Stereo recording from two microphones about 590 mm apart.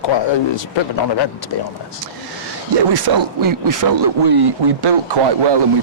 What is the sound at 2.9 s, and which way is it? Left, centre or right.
Speech, right.